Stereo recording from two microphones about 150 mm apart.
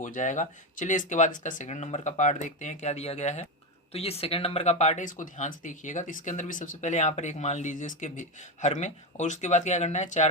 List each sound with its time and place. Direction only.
0.0 s speech: 55° left (ahead or behind)